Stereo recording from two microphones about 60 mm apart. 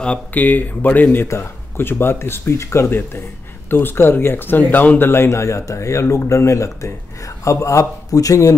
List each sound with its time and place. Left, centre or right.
0.3 s speech: left
1.1 s a man's voice: left